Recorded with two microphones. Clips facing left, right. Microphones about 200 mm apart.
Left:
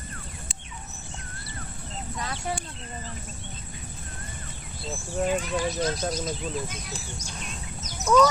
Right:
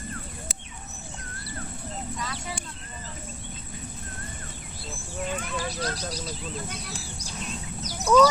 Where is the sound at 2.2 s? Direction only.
50° left (ahead or behind).